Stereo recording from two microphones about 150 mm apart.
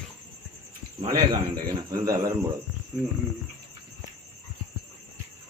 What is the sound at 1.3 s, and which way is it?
A man's voice, 25° right (ahead or behind).